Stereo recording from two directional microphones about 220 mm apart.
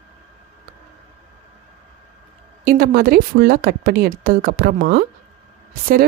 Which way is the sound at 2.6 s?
40° right (ahead or behind).